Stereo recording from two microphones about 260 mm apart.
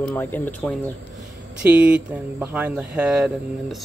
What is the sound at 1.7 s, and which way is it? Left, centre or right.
Speech, centre.